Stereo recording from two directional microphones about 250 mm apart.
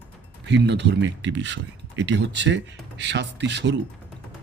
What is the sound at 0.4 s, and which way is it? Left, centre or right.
Speech, right.